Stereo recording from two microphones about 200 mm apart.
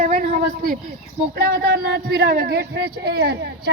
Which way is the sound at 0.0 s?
45° right (ahead or behind).